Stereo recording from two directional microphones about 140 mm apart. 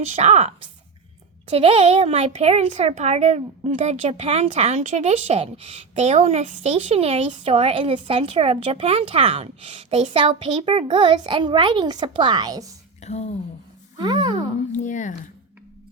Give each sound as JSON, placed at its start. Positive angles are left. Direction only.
{"t": 0.1, "sound": "speech", "side_deg": -50}
{"t": 13.0, "sound": "speech", "side_deg": 55}
{"t": 13.9, "sound": "a child's voice", "side_deg": -30}
{"t": 14.8, "sound": "speech", "side_deg": 60}